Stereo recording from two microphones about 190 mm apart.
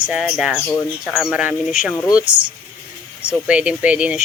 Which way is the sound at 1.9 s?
10° left (ahead or behind).